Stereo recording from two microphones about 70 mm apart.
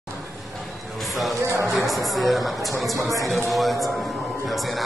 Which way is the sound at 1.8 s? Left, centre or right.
Centre.